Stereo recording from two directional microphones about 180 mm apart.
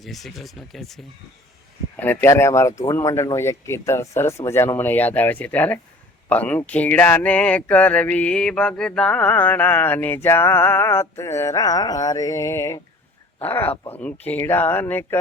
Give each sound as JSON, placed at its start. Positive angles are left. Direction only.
{"t": 0.0, "sound": "speech", "side_deg": 0}
{"t": 2.0, "sound": "speech", "side_deg": 10}